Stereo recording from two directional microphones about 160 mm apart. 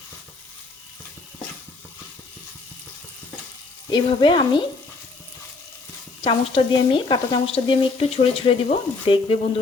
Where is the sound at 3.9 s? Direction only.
30° left (ahead or behind).